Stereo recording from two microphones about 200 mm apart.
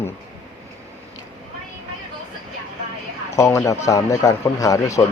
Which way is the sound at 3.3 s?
15° left (ahead or behind).